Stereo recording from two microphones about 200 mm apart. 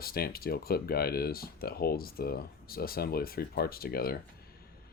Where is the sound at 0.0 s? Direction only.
50° left (ahead or behind).